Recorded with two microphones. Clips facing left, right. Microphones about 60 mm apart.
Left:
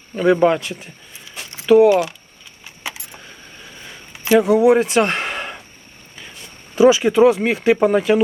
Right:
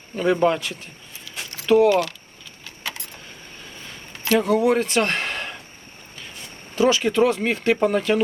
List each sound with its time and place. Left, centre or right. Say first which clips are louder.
0.1 s a man's voice: left 5 dB; centre
2.6 s keys jangling: left 2 dB; centre
4.2 s speech: left 5 dB; centre
6.7 s speech: left 6 dB; centre